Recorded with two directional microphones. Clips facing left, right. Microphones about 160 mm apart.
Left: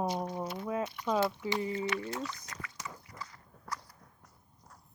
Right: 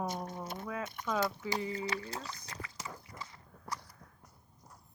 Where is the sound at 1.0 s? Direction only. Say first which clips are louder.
Left 4 dB; 45° right (ahead or behind).